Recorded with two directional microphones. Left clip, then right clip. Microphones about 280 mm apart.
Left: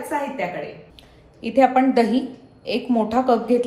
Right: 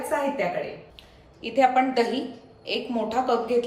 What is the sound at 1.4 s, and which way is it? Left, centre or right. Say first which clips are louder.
A woman's voice: left 4 dB; centre.